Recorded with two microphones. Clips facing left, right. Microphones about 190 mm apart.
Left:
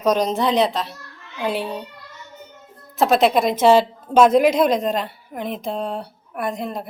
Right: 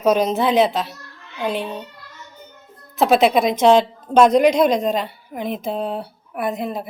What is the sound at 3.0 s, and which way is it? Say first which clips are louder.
A woman's voice: right 1 dB; centre (ahead or behind).